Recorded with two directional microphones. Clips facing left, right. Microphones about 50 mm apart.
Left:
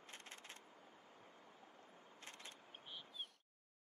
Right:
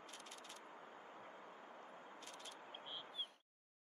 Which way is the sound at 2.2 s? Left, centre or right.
Left.